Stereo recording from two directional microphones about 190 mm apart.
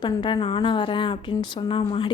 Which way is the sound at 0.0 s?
25° left (ahead or behind).